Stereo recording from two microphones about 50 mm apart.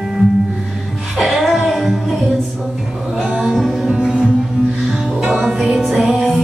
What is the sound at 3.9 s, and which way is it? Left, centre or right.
Music, centre.